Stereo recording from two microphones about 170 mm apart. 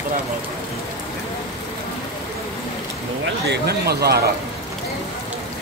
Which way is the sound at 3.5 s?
70° right (ahead or behind).